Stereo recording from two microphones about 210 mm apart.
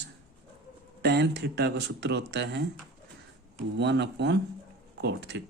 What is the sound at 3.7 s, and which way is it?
Speech, 55° right (ahead or behind).